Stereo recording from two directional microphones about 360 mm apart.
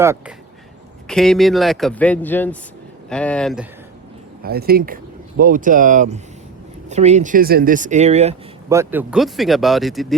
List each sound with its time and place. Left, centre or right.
0.0 s speech: centre
4.4 s speech: right; by 10.2 s centre